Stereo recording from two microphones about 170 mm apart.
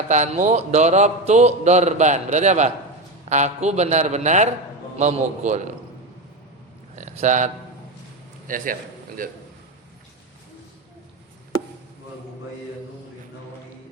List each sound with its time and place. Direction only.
0.1 s a man's voice: 45° right (ahead or behind)
6.9 s a man's voice: 45° right (ahead or behind)